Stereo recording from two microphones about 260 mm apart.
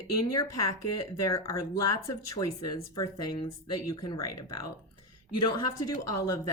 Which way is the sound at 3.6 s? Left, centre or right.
Left.